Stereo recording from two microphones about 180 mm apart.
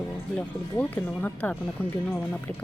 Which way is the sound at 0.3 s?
5° left (ahead or behind).